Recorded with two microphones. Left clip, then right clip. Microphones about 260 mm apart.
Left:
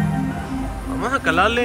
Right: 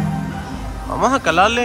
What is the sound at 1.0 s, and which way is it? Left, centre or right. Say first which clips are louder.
Speech: right 4 dB; centre.